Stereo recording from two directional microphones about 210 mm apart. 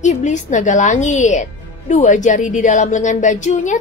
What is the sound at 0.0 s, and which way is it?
A woman's voice, 35° left (ahead or behind).